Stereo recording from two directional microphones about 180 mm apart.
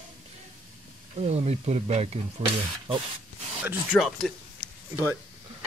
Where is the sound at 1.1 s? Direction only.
35° right (ahead or behind).